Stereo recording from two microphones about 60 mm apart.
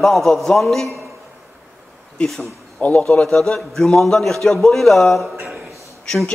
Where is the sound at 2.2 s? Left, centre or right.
Centre.